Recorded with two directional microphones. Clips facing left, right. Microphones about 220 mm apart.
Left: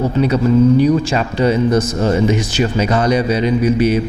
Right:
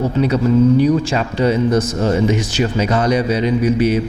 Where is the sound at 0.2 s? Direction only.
20° left (ahead or behind).